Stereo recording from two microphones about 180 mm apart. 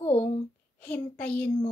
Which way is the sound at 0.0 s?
35° left (ahead or behind).